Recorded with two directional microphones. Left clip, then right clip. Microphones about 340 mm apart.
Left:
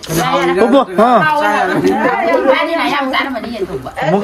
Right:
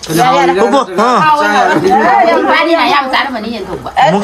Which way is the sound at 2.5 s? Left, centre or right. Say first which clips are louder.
Right 5 dB; right.